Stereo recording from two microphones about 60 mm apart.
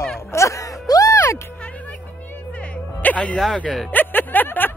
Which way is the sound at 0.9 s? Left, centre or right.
Left.